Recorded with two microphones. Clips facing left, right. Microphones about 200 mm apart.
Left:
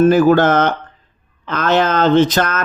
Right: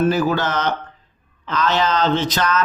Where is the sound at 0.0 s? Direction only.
50° left (ahead or behind).